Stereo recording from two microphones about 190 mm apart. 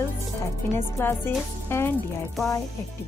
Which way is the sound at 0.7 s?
10° left (ahead or behind).